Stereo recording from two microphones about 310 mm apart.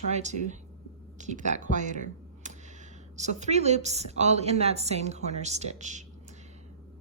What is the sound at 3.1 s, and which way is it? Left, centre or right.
A woman's voice, right.